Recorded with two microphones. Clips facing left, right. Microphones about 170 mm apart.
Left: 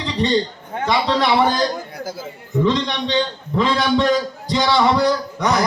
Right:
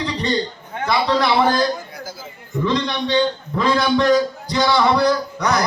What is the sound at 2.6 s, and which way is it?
Speech, 20° left (ahead or behind).